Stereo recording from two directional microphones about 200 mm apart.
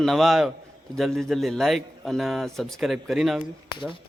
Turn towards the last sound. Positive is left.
turn(degrees=0)  # may be behind; listen again after turning